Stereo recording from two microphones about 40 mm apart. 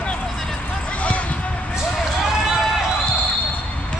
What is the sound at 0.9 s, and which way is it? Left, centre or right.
Basketball bounce, left.